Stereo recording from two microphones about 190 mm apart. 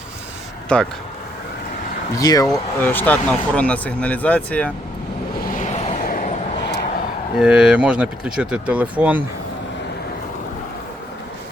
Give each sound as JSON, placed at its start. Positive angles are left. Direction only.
{"t": 0.7, "sound": "speech", "side_deg": 5}
{"t": 2.1, "sound": "speech", "side_deg": 20}
{"t": 5.5, "sound": "vehicle", "side_deg": 40}
{"t": 7.3, "sound": "speech", "side_deg": -5}